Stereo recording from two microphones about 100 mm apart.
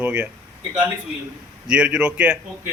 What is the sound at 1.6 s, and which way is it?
Speech, 10° right (ahead or behind).